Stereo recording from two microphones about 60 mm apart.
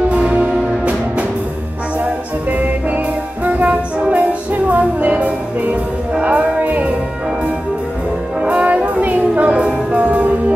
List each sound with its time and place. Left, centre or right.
0.1 s music: centre
3.4 s music: right
8.4 s music: right